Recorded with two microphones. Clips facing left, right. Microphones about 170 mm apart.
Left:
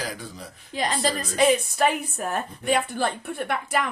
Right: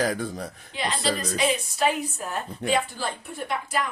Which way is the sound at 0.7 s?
45° left (ahead or behind).